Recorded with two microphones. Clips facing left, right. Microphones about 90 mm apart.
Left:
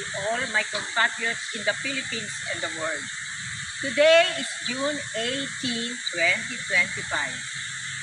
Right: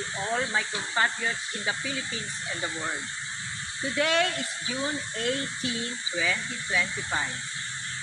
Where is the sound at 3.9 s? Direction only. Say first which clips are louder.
Left 8 dB; 20° right (ahead or behind).